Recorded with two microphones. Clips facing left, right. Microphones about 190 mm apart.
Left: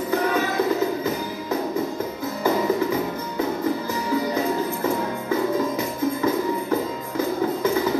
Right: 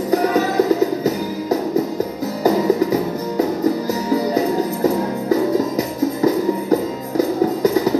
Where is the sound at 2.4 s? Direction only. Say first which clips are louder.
Right 6 dB; 40° right (ahead or behind).